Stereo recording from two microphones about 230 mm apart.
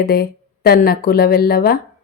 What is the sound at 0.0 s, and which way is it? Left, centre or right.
A woman's voice, left.